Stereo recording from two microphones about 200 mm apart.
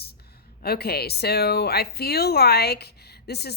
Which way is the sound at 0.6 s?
50° left (ahead or behind).